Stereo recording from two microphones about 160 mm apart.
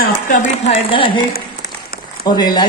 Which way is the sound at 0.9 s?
30° left (ahead or behind).